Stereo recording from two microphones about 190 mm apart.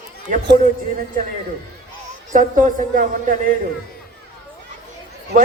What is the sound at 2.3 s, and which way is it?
A man's voice, 45° right (ahead or behind).